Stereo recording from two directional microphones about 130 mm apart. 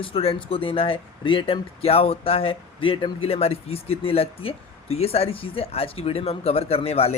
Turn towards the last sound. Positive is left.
turn(degrees=50)  # may be behind; listen again after turning